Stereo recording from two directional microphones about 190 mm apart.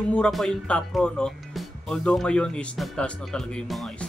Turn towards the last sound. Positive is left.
turn(degrees=5)  # may be behind; listen again after turning